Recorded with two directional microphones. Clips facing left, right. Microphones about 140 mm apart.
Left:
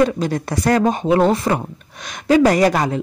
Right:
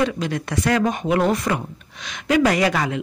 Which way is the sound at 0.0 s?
40° left (ahead or behind).